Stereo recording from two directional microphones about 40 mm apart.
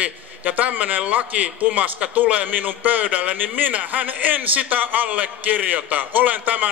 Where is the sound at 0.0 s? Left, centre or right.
Right.